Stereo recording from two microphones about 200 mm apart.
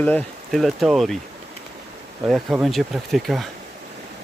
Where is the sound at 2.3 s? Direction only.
Centre (ahead or behind).